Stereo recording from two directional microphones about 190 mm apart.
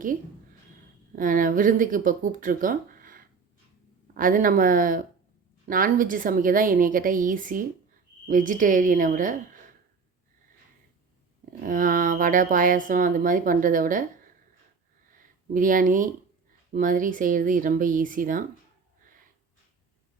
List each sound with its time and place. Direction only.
1.1 s speech: 45° right (ahead or behind)
11.6 s speech: 45° right (ahead or behind)
15.1 s a sound: 45° right (ahead or behind)
16.7 s speech: 45° right (ahead or behind)